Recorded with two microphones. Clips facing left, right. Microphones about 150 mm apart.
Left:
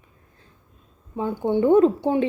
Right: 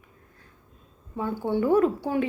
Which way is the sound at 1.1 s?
20° left (ahead or behind).